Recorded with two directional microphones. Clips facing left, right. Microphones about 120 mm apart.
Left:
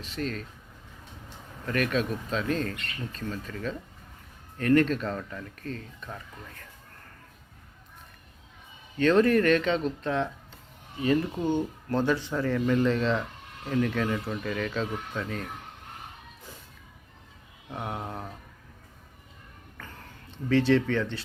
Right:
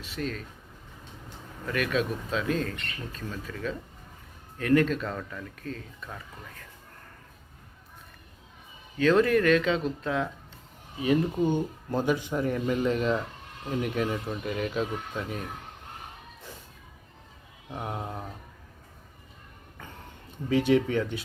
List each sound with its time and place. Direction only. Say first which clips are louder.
0.0 s speech: left 1 dB; 5° right (ahead or behind)
1.6 s speech: even; 5° right (ahead or behind)
9.0 s speech: left 1 dB; centre (ahead or behind)
11.0 s speech: right 1 dB; 15° right (ahead or behind)
17.8 s speech: even; 5° right (ahead or behind)
20.5 s speech: even; 15° right (ahead or behind)